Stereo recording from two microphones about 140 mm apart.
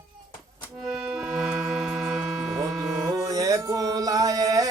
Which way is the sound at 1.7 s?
Centre (ahead or behind).